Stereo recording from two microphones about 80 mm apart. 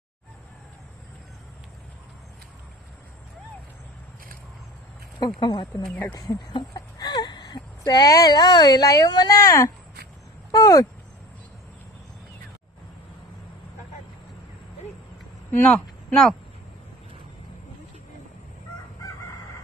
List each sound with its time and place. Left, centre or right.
5.2 s speech: left
9.3 s speech: left
15.7 s speech: centre